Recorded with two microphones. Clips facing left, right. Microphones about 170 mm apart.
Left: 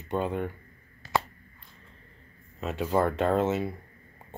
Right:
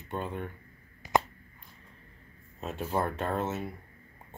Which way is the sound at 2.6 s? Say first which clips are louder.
Left 5 dB; 90° left.